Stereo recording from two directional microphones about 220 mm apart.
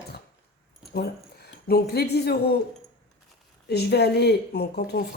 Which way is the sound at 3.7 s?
45° left (ahead or behind).